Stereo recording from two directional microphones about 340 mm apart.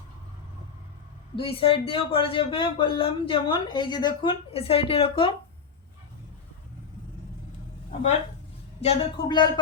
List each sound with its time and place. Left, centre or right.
1.4 s speech: centre
8.8 s speech: centre